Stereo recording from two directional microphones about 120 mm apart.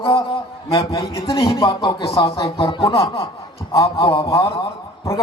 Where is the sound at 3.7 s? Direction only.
30° left (ahead or behind).